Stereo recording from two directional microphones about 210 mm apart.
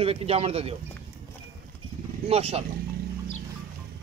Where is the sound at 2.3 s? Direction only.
30° right (ahead or behind).